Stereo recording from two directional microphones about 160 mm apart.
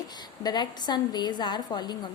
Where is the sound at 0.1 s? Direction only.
25° left (ahead or behind).